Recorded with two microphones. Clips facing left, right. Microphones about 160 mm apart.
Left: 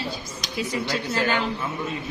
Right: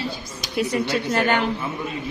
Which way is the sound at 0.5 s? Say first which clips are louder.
Right 5 dB; 65° right (ahead or behind).